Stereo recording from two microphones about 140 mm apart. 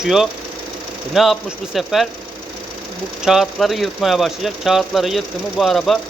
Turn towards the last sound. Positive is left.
turn(degrees=0)  # may be behind; listen again after turning